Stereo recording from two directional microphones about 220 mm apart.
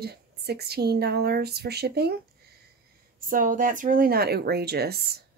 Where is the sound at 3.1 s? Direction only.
40° right (ahead or behind).